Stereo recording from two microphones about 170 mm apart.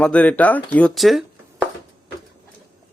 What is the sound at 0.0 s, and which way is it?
Speech, 5° left (ahead or behind).